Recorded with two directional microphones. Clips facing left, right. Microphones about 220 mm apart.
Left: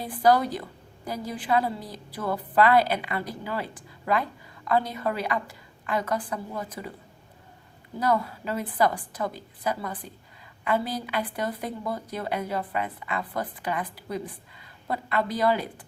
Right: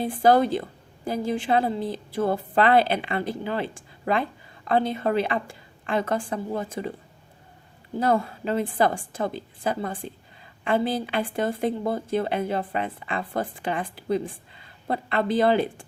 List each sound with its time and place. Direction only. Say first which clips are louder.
0.0 s a woman's voice: right 3 dB; 25° right (ahead or behind)
7.9 s a woman's voice: right 3 dB; 25° right (ahead or behind)